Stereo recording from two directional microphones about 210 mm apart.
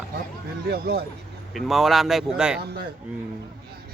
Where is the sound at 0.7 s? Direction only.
50° right (ahead or behind).